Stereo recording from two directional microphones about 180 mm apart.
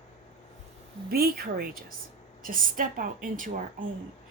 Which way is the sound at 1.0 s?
60° right (ahead or behind).